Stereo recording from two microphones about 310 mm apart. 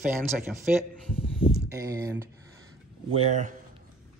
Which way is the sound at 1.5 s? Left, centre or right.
Centre.